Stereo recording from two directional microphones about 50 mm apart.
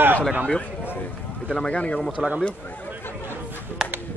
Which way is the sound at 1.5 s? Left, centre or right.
Left.